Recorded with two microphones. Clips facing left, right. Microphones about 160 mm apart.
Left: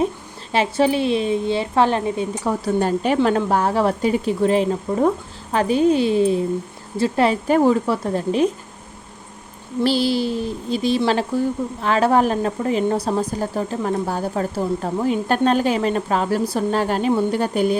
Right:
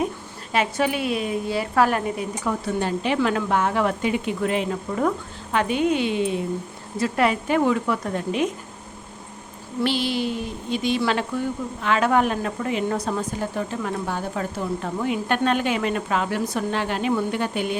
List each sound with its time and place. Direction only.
0.5 s a woman's voice: 30° left (ahead or behind)
2.8 s a woman's voice: 45° left (ahead or behind)
9.8 s a woman's voice: 35° left (ahead or behind)